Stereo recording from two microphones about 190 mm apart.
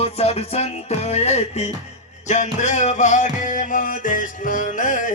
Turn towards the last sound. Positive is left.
turn(degrees=40)  # may be behind; listen again after turning